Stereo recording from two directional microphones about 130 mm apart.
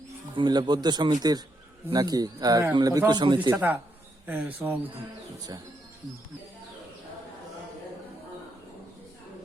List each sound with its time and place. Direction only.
0.3 s a man's voice: 35° right (ahead or behind)
3.5 s speech: 15° right (ahead or behind)